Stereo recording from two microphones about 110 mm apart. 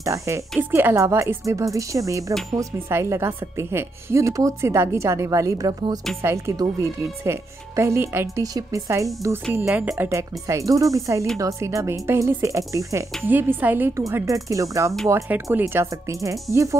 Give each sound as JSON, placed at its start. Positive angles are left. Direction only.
{"t": 0.0, "sound": "speech", "side_deg": -30}
{"t": 6.2, "sound": "speech", "side_deg": -25}
{"t": 9.5, "sound": "a woman's voice", "side_deg": -15}
{"t": 9.9, "sound": "a woman's voice", "side_deg": -25}
{"t": 14.0, "sound": "speech", "side_deg": -30}